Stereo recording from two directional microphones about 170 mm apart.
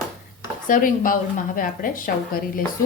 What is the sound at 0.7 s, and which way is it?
A woman's voice, 55° left (ahead or behind).